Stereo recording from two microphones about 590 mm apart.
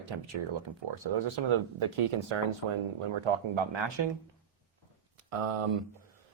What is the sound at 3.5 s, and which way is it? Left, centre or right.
Speech, right.